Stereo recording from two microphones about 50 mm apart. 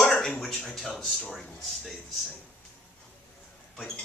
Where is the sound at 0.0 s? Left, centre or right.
Centre.